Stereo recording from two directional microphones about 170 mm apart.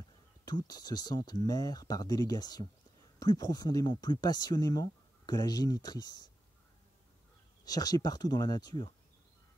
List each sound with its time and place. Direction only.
0.5 s speech: 25° left (ahead or behind)
7.6 s speech: 20° left (ahead or behind)